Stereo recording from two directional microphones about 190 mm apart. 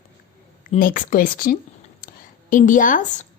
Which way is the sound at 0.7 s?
45° left (ahead or behind).